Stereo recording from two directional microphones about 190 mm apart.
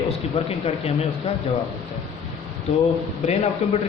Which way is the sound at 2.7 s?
35° left (ahead or behind).